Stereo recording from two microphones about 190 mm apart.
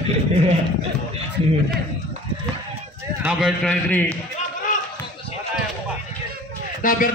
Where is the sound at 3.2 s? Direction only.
5° right (ahead or behind).